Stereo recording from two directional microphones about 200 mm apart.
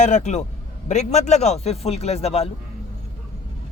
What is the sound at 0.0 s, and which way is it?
Speech, 35° left (ahead or behind).